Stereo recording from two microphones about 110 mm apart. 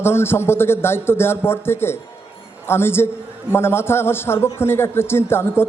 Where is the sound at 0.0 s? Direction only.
20° left (ahead or behind).